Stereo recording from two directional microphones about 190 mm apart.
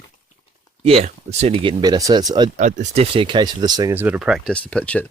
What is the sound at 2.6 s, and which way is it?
Speech, 40° right (ahead or behind).